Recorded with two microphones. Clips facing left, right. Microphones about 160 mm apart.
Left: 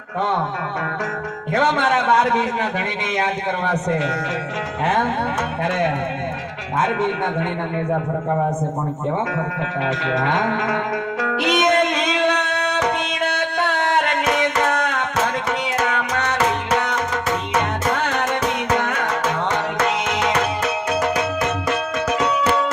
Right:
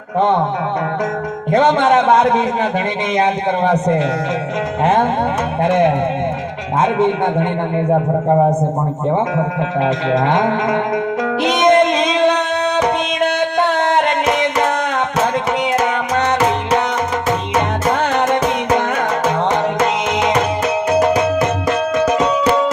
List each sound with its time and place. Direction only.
0.2 s music: 20° right (ahead or behind)
1.5 s music: 20° right (ahead or behind)
5.6 s music: 20° right (ahead or behind)
7.9 s a man's voice: 40° right (ahead or behind)
9.8 s music: 20° right (ahead or behind)
18.7 s music: 20° right (ahead or behind)